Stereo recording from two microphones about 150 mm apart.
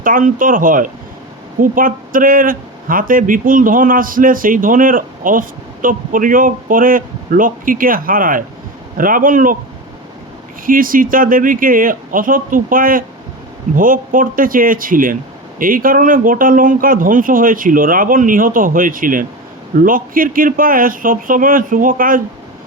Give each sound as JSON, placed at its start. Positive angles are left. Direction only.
{"t": 0.0, "sound": "speech", "side_deg": -65}
{"t": 10.7, "sound": "speech", "side_deg": -70}